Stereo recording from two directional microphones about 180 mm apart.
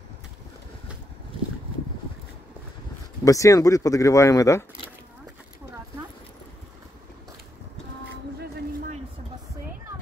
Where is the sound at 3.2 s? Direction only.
20° left (ahead or behind).